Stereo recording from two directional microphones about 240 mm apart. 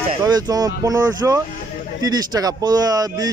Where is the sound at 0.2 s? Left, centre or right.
Centre.